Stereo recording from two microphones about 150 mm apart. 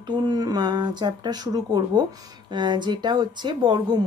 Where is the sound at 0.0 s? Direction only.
30° right (ahead or behind).